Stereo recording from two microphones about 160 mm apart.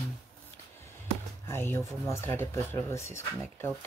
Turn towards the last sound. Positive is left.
turn(degrees=15)  # may be behind; listen again after turning